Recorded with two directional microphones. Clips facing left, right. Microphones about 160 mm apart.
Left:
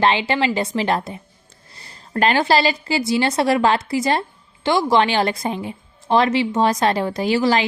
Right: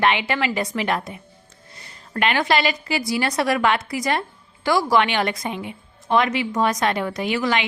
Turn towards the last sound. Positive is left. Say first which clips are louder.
# left 4 dB
turn(degrees=30)  # may be behind; listen again after turning